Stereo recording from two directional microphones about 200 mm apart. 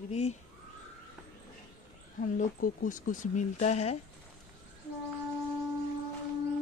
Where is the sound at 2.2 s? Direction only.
45° left (ahead or behind).